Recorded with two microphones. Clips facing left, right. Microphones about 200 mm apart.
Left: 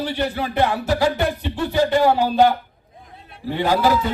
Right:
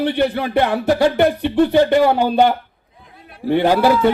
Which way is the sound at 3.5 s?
60° right (ahead or behind).